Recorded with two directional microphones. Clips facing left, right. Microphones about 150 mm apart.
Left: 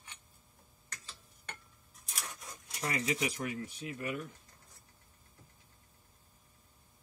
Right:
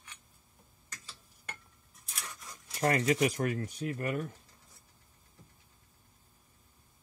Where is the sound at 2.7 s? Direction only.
50° right (ahead or behind).